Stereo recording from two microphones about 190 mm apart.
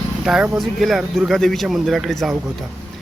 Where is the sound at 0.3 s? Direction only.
5° right (ahead or behind).